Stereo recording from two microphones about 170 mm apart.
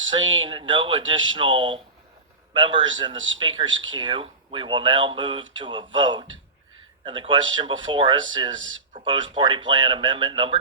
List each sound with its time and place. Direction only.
0.1 s a man's voice: 25° right (ahead or behind)